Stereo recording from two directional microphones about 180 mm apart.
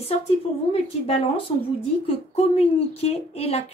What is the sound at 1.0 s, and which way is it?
A woman's voice, 30° left (ahead or behind).